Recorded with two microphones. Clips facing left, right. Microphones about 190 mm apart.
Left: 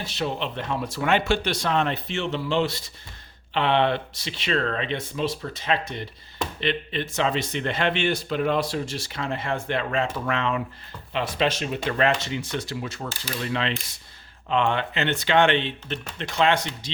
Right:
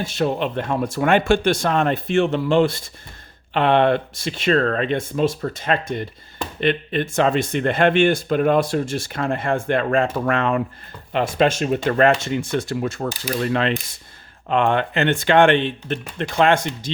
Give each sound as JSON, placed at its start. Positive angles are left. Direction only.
{"t": 0.0, "sound": "speech", "side_deg": -50}